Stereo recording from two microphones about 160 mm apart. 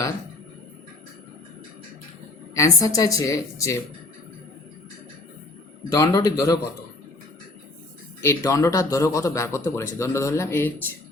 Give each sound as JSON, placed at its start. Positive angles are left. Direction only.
{"t": 2.6, "sound": "speech", "side_deg": 20}
{"t": 5.9, "sound": "speech", "side_deg": 20}
{"t": 8.2, "sound": "speech", "side_deg": 20}